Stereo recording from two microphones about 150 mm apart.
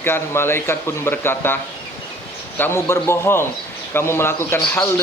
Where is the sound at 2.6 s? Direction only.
15° left (ahead or behind).